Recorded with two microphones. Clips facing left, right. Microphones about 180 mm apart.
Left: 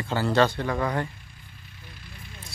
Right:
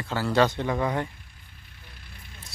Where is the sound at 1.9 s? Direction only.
55° right (ahead or behind).